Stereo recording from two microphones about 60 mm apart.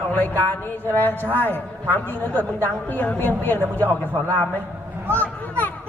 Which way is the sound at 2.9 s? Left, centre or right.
Left.